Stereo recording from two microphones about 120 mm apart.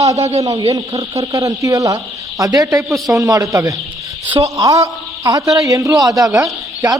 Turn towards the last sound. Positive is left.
turn(degrees=-30)  # may be behind; listen again after turning